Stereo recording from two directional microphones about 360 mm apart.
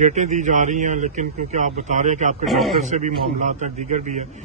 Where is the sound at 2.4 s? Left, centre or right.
Centre.